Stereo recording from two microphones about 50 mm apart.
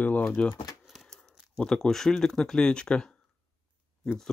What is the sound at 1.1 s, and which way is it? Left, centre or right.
Speech, centre.